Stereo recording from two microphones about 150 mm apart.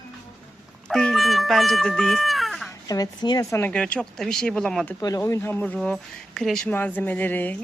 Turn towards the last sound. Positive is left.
turn(degrees=10)  # may be behind; listen again after turning